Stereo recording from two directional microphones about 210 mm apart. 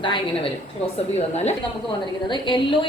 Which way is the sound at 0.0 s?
25° left (ahead or behind).